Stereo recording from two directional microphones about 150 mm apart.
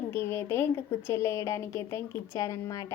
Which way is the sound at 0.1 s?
15° left (ahead or behind).